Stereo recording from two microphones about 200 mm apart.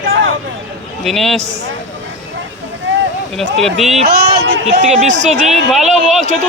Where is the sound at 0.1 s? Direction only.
70° right (ahead or behind).